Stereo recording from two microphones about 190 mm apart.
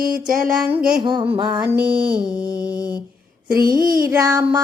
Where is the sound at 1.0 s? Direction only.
25° right (ahead or behind).